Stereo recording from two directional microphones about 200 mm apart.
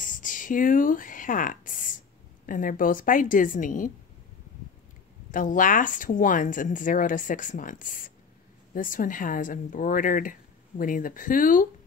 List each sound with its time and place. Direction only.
0.0 s speech: 40° left (ahead or behind)
5.3 s speech: 40° left (ahead or behind)